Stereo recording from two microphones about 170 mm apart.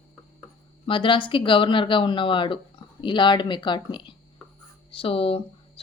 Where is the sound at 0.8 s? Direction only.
30° left (ahead or behind).